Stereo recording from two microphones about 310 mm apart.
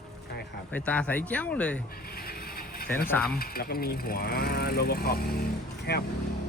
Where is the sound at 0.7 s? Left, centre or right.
Centre.